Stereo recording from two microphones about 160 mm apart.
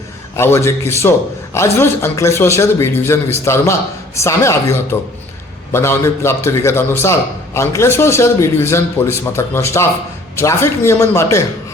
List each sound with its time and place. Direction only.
0.3 s a man's voice: 15° left (ahead or behind)